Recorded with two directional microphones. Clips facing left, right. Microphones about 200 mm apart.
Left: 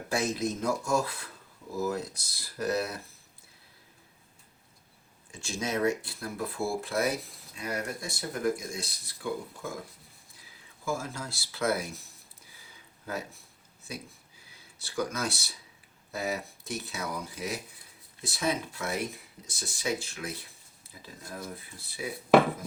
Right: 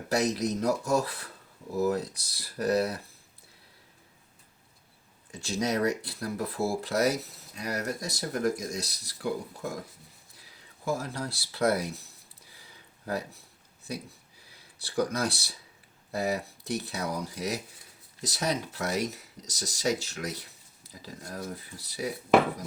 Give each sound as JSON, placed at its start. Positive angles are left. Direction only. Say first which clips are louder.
{"t": 0.3, "sound": "speech", "louder": "right 2 dB", "side_deg": -35}
{"t": 5.3, "sound": "speech", "louder": "right 3 dB", "side_deg": -35}
{"t": 10.8, "sound": "speech", "louder": "right 2 dB", "side_deg": -35}
{"t": 14.5, "sound": "speech", "louder": "right 4 dB", "side_deg": -35}